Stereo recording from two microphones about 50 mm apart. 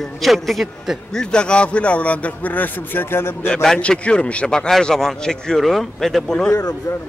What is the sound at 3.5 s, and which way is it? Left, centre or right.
Speech, centre.